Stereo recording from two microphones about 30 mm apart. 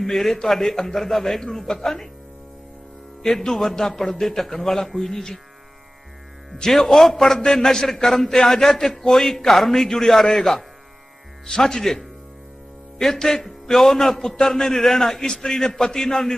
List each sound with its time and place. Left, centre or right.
0.0 s a man's voice: centre
0.7 s a man's voice: centre
0.9 s a man's voice: centre
3.5 s a man's voice: centre
3.8 s a man's voice: centre
6.6 s a man's voice: centre
13.1 s a man's voice: centre